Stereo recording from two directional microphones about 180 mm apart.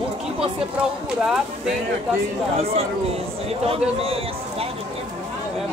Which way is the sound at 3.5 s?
35° right (ahead or behind).